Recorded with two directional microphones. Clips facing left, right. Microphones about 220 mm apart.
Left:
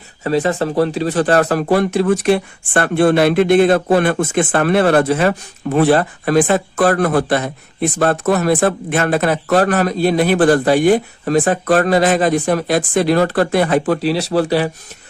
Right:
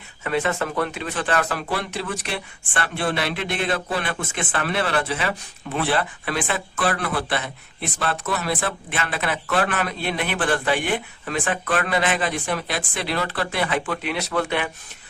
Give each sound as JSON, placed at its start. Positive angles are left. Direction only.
{"t": 0.3, "sound": "speech", "side_deg": 35}